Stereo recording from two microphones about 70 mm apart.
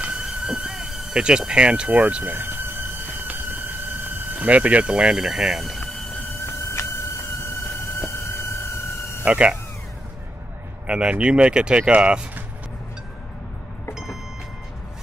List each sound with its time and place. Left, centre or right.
0.1 s speech: centre
2.3 s a sound: right
5.1 s speech: centre
7.3 s a sound: left
9.2 s speech: centre
10.9 s speech: centre